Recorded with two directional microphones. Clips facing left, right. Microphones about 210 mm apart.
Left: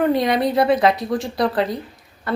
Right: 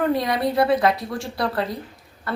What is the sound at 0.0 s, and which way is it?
A woman's voice, 20° left (ahead or behind).